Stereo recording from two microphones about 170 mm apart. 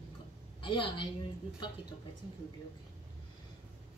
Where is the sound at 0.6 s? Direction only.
30° left (ahead or behind).